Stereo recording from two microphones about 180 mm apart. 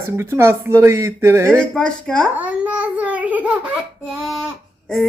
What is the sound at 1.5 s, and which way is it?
Speech, 5° left (ahead or behind).